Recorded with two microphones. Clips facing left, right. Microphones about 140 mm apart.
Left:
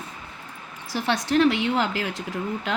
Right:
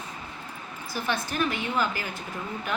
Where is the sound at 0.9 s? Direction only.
80° left.